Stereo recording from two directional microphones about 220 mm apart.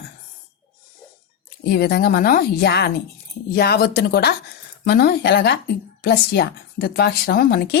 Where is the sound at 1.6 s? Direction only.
45° left (ahead or behind).